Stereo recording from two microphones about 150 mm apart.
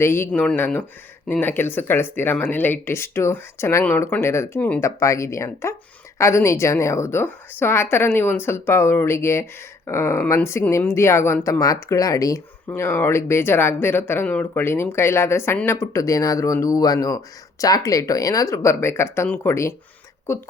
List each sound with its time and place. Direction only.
0.0 s a woman's voice: 15° left (ahead or behind)